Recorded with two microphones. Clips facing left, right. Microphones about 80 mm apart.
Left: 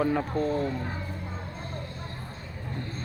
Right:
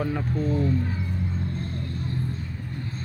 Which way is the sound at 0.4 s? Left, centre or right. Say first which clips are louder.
Right 2 dB; centre.